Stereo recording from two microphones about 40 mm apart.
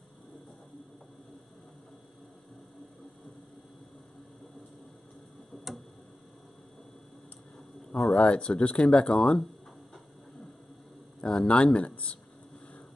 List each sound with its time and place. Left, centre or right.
8.1 s speech: left
11.1 s a sound: left
11.5 s speech: left